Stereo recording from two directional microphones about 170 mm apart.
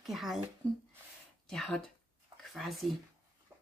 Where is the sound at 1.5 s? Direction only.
5° left (ahead or behind).